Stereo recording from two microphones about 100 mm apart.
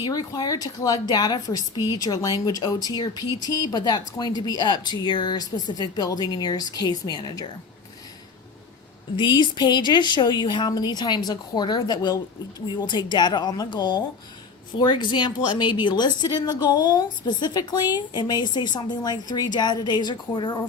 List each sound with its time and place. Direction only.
0.0 s a woman's voice: 45° left (ahead or behind)
9.1 s speech: 50° left (ahead or behind)